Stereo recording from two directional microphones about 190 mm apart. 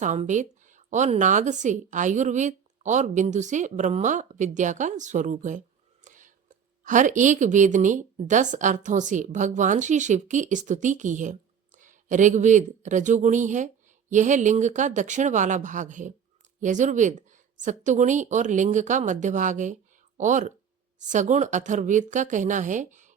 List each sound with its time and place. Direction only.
0.0 s a woman's voice: 40° right (ahead or behind)